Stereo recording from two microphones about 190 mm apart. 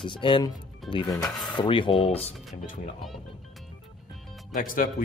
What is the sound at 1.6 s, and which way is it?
Speech, 25° left (ahead or behind).